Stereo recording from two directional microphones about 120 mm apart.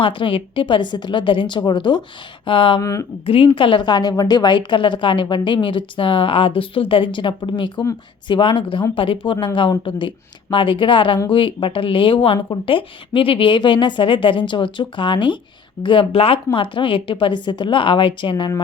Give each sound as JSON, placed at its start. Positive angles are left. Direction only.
{"t": 0.0, "sound": "a woman's voice", "side_deg": 45}
{"t": 2.8, "sound": "speech", "side_deg": 25}
{"t": 3.2, "sound": "a woman's voice", "side_deg": 50}